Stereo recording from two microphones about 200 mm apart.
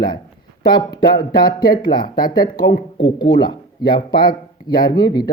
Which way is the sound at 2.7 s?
55° left (ahead or behind).